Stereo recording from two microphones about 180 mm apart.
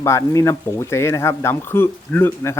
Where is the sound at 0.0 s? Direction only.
15° left (ahead or behind).